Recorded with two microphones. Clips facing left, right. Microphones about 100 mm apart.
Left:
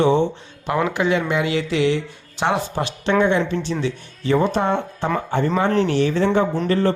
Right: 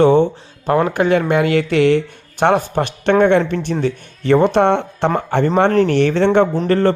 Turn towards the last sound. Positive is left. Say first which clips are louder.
# right 4 dB
turn(degrees=-60)  # may be behind; listen again after turning